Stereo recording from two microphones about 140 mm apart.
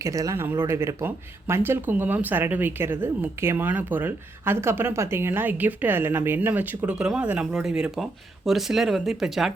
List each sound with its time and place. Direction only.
0.0 s speech: 25° right (ahead or behind); by 9.5 s centre (ahead or behind)